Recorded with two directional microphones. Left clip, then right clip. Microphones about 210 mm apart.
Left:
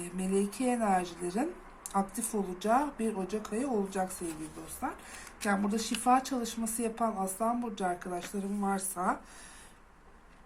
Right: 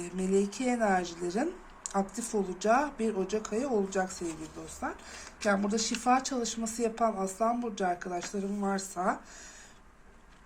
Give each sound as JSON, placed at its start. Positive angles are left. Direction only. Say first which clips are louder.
{"t": 0.0, "sound": "speech", "louder": "right 3 dB", "side_deg": -20}